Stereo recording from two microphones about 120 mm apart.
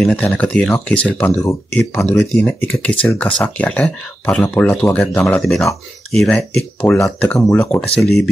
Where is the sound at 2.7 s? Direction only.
10° left (ahead or behind).